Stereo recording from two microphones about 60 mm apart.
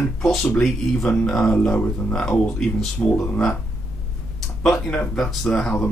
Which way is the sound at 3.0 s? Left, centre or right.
Left.